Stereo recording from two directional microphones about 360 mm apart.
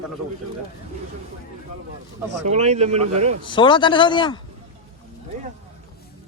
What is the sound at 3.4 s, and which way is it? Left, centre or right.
Speech, centre.